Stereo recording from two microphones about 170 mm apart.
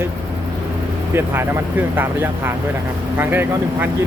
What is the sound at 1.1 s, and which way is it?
Speech, 15° right (ahead or behind).